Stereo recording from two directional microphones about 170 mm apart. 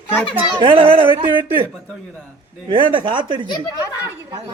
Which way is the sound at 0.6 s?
30° right (ahead or behind).